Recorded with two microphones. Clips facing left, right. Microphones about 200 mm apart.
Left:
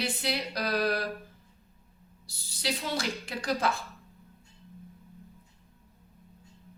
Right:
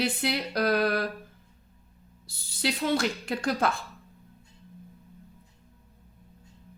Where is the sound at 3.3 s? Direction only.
55° right (ahead or behind).